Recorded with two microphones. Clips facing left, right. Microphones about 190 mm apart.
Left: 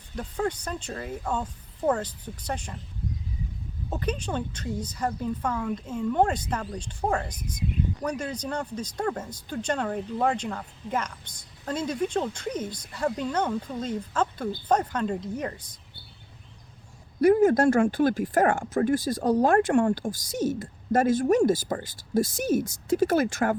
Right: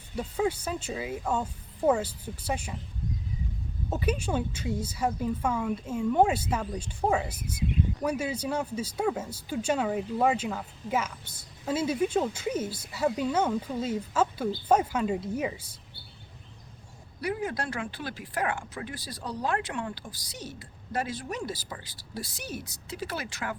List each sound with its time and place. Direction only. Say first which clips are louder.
0.2 s speech: right 1 dB; 5° right (ahead or behind)
3.8 s speech: right 1 dB; 10° right (ahead or behind)
17.2 s speech: left 13 dB; 45° left (ahead or behind)